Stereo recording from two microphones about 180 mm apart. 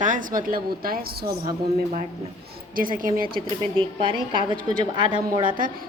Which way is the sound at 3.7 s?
30° right (ahead or behind).